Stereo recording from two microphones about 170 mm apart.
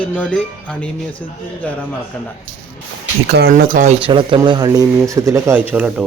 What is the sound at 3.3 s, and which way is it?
Speech, 65° right (ahead or behind).